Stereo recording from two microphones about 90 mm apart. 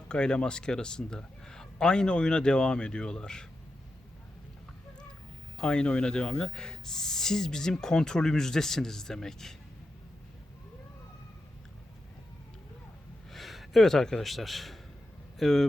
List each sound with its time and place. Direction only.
0.1 s a man's voice: 10° left (ahead or behind)
5.5 s speech: 10° left (ahead or behind)
13.3 s speech: centre (ahead or behind)